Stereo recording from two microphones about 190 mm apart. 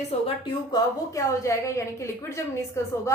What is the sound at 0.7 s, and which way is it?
A woman's voice, 15° left (ahead or behind).